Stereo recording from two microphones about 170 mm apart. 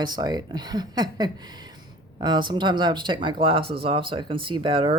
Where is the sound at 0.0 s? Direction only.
25° right (ahead or behind).